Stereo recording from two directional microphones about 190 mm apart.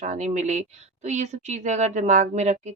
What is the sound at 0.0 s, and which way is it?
Speech, 40° right (ahead or behind).